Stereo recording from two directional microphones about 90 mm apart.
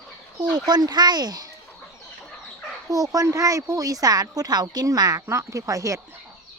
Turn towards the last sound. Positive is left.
turn(degrees=-35)  # may be behind; listen again after turning